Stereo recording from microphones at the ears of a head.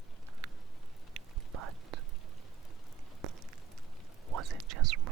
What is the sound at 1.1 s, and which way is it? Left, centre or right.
Whispering, right.